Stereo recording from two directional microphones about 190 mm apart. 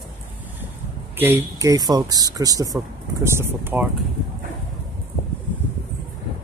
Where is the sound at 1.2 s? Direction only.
15° right (ahead or behind).